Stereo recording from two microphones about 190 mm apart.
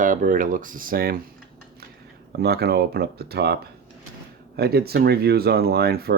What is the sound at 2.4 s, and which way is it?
Speech, 55° right (ahead or behind).